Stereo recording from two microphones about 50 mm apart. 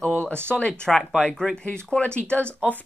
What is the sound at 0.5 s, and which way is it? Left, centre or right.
Speech, left.